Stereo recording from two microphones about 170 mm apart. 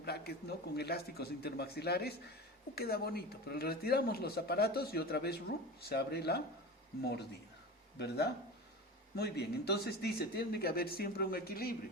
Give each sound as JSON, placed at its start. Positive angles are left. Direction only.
{"t": 0.0, "sound": "a sound", "side_deg": 70}
{"t": 0.8, "sound": "speech", "side_deg": 70}
{"t": 7.9, "sound": "speech", "side_deg": 75}